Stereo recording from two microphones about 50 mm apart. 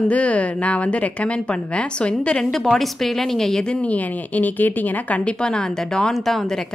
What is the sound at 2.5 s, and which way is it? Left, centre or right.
A woman's voice, centre.